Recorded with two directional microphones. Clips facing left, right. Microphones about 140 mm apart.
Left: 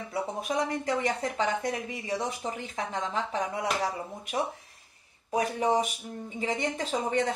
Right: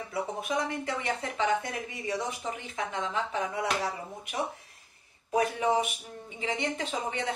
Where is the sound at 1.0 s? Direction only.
40° left (ahead or behind).